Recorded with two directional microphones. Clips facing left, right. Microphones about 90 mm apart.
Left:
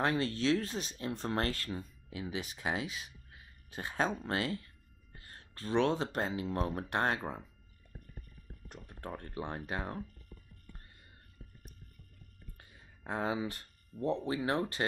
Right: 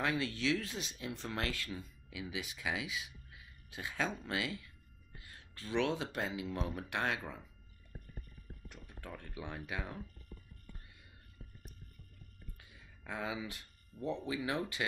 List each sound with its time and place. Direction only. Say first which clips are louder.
0.0 s speech: left 4 dB; 40° left (ahead or behind)
4.3 s music: left 4 dB; 40° left (ahead or behind)
6.1 s speech: left 4 dB; 40° left (ahead or behind)
8.6 s speech: left 6 dB; 40° left (ahead or behind)
12.5 s a sound: left 1 dB; 40° left (ahead or behind)
14.0 s speech: left 5 dB; 40° left (ahead or behind)